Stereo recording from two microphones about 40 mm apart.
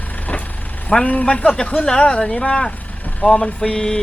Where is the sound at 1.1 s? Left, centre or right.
Left.